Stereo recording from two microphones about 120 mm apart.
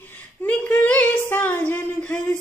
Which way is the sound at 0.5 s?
10° left (ahead or behind).